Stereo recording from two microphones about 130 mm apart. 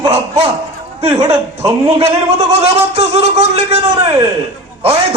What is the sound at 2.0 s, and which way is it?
Speech, 55° right (ahead or behind).